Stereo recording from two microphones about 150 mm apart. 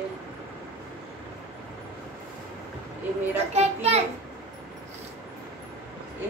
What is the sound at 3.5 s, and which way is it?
Speech, 45° right (ahead or behind).